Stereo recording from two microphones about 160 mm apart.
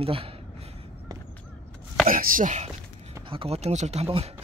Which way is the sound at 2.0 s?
60° right (ahead or behind).